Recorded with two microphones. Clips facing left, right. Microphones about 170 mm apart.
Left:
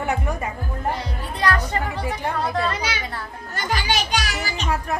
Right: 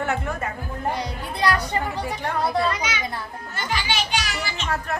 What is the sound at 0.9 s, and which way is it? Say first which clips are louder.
Speech: right 1 dB; 15° right (ahead or behind).